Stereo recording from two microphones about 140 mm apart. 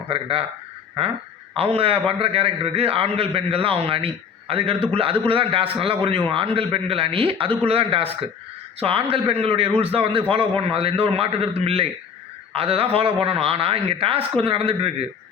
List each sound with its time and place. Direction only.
0.1 s speech: 40° right (ahead or behind)
1.5 s a man's voice: 45° right (ahead or behind)